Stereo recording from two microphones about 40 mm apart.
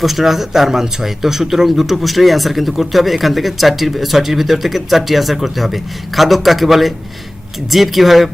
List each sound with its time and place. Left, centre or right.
0.0 s speech: centre